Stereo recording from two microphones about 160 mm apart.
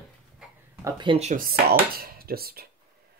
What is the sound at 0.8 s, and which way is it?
Speech, 30° right (ahead or behind).